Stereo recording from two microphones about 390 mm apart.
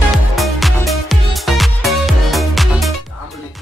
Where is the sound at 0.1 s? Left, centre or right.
Centre.